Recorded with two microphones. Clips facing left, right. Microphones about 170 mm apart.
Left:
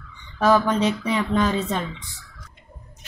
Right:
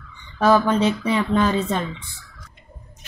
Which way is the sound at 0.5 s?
5° right (ahead or behind).